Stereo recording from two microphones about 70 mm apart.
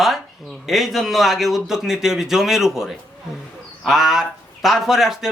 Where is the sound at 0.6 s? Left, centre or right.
Centre.